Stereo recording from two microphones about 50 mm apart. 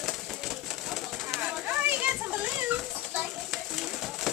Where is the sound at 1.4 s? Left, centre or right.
Right.